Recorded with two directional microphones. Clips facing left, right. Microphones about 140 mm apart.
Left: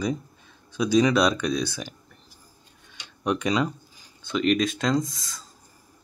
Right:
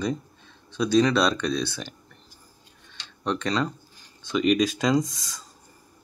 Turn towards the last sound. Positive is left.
turn(degrees=0)  # may be behind; listen again after turning